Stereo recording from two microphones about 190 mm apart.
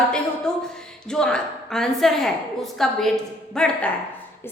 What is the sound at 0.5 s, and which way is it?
A woman's voice, 5° left (ahead or behind).